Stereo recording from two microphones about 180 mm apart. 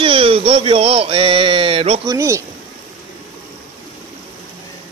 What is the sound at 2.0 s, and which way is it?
Speech, 15° right (ahead or behind).